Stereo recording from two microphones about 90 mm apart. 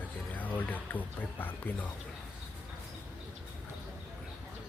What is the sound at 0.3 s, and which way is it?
Speech, 20° left (ahead or behind).